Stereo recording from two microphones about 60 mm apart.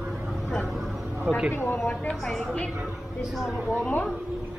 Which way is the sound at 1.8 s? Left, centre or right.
Centre.